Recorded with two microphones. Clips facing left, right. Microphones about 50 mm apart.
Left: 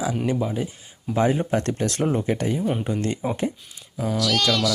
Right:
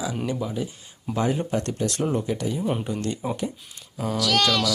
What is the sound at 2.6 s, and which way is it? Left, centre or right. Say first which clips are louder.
Speech: left 1 dB; centre.